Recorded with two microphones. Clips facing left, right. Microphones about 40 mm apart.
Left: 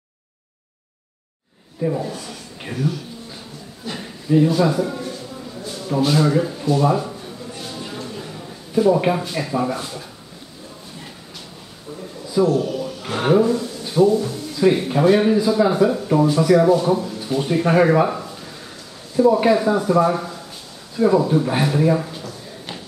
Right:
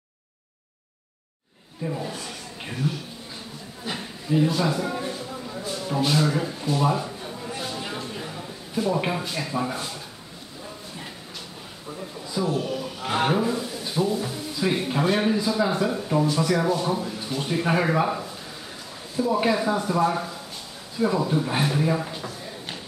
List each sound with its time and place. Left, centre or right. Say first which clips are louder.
1.8 s speech: left 8 dB; centre
2.0 s a man's voice: left 3 dB; centre
4.3 s speech: left 6 dB; centre
4.8 s a sound: left 1 dB; centre
5.6 s a man's voice: left 5 dB; centre
7.5 s a sound: even; centre
8.7 s speech: left 8 dB; centre
12.4 s a man's voice: left 6 dB; centre
14.6 s speech: left 8 dB; centre